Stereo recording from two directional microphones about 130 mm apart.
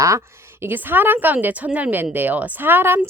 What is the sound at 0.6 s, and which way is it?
A woman's voice, 15° right (ahead or behind).